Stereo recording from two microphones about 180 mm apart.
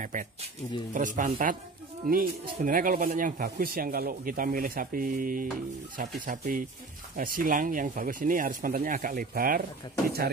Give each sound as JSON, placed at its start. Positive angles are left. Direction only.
{"t": 0.0, "sound": "speech", "side_deg": -45}